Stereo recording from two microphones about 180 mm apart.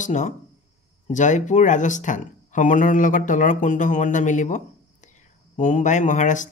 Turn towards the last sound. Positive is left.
turn(degrees=45)  # may be behind; listen again after turning